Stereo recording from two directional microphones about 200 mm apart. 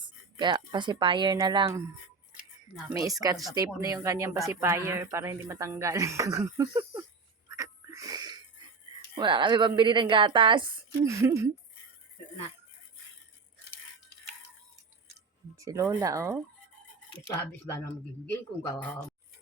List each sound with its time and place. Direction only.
0.3 s a woman's voice: 20° right (ahead or behind)
3.1 s speech: 15° right (ahead or behind)
7.4 s a sound: 15° right (ahead or behind)
9.1 s a woman's voice: 25° right (ahead or behind)
15.5 s speech: 15° right (ahead or behind)
18.3 s speech: 10° left (ahead or behind)